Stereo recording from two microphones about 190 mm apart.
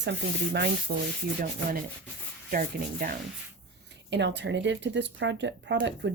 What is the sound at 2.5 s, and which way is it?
Speech, 50° right (ahead or behind).